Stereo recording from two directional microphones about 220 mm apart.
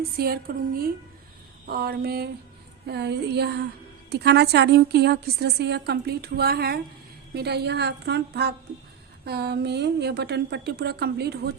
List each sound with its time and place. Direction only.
0.2 s a woman's voice: 45° right (ahead or behind)